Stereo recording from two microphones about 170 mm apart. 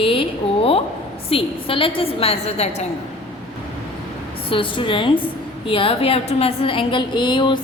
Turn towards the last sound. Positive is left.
turn(degrees=25)  # may be behind; listen again after turning